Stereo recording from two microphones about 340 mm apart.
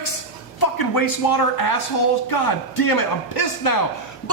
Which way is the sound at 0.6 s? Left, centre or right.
Left.